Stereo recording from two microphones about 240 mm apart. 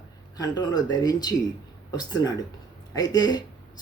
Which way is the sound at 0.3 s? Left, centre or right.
Centre.